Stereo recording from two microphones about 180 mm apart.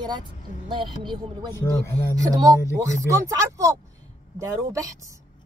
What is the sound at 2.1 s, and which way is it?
Speech, 20° right (ahead or behind).